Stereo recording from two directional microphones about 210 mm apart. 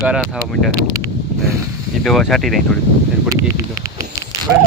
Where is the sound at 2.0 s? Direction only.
Centre (ahead or behind).